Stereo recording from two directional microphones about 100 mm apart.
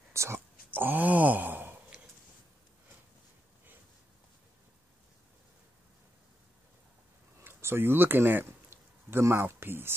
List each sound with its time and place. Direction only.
0.1 s speech: 25° right (ahead or behind)
7.4 s speech: 25° right (ahead or behind)